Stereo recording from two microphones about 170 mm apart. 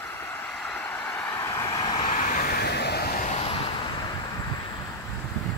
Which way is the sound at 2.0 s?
50° left (ahead or behind).